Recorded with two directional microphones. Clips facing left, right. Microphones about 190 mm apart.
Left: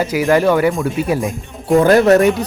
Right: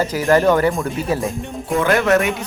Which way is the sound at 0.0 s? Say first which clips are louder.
Left 1 dB; 15° left (ahead or behind).